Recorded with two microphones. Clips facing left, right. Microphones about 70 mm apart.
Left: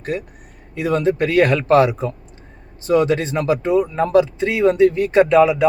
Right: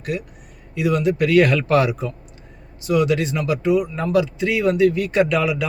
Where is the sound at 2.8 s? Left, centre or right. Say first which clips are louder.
Left 2 dB; left.